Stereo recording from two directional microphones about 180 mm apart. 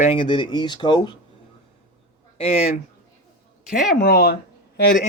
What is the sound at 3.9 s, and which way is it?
Speech, 60° left (ahead or behind).